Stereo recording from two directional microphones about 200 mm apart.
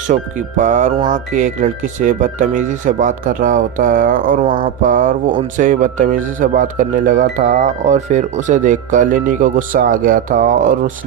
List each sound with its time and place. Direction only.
0.1 s speech: 35° right (ahead or behind)